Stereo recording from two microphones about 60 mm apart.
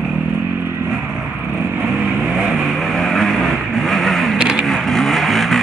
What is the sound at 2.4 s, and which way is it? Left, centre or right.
Vehicle, centre.